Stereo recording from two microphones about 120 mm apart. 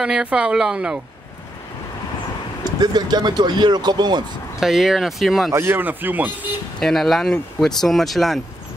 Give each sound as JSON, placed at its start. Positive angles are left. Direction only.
{"t": 0.0, "sound": "speech", "side_deg": -5}
{"t": 2.8, "sound": "speech", "side_deg": -35}
{"t": 4.6, "sound": "speech", "side_deg": -5}
{"t": 5.5, "sound": "speech", "side_deg": -20}
{"t": 6.8, "sound": "speech", "side_deg": 0}